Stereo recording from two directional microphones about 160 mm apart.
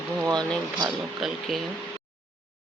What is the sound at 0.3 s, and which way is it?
Speech, 25° right (ahead or behind).